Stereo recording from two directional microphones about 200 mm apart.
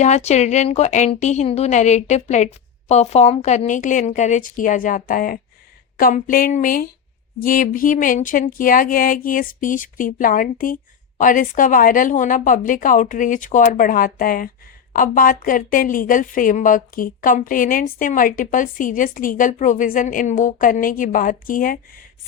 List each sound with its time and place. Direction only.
0.0 s speech: 35° left (ahead or behind)